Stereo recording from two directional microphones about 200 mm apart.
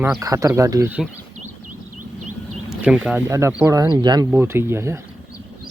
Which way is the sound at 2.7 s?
5° right (ahead or behind).